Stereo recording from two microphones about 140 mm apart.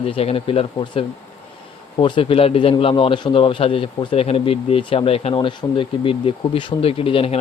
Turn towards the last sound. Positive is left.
turn(degrees=40)  # may be behind; listen again after turning